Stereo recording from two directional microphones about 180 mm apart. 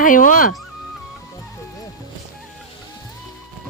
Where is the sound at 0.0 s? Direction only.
50° left (ahead or behind).